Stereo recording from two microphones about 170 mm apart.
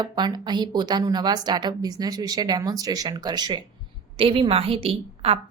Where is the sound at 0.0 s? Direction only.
25° right (ahead or behind).